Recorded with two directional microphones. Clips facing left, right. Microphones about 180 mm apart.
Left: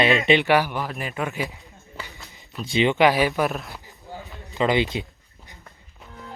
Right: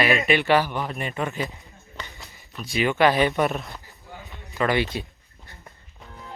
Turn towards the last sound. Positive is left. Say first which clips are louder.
# left 2 dB
turn(degrees=20)  # may be behind; listen again after turning